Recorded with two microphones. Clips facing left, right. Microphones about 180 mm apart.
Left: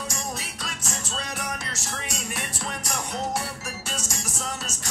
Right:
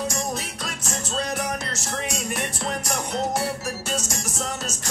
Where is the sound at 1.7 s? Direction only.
45° right (ahead or behind).